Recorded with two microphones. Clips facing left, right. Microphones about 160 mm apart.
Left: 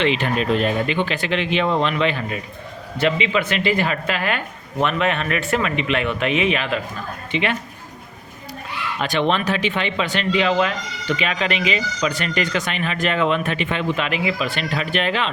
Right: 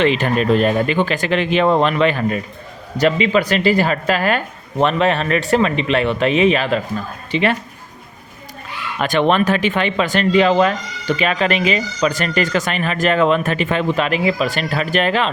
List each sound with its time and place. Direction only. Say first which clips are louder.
0.0 s speech: right 4 dB; 45° right (ahead or behind)
9.0 s speech: right 5 dB; 50° right (ahead or behind)